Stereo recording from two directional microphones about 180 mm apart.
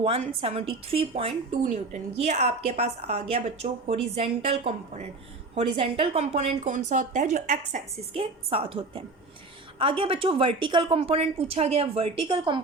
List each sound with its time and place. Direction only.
0.0 s speech: 30° right (ahead or behind)